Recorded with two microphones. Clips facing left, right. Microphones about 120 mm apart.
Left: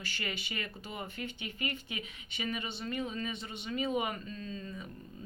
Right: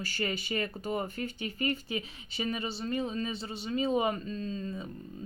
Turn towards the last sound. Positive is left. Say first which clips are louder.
# right 6 dB
turn(degrees=-30)  # may be behind; listen again after turning